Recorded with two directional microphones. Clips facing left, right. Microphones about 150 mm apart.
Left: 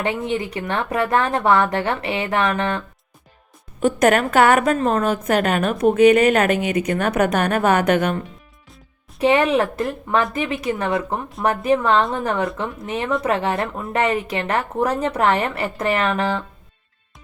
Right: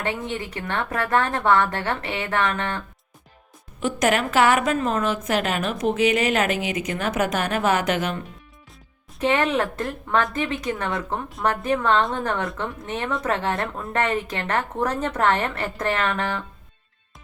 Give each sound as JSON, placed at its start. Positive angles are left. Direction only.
{"t": 0.0, "sound": "a woman's voice", "side_deg": 15}
{"t": 3.8, "sound": "a woman's voice", "side_deg": 50}
{"t": 9.1, "sound": "a woman's voice", "side_deg": 15}